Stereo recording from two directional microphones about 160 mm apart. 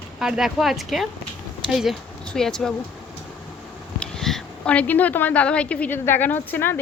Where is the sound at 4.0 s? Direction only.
5° left (ahead or behind).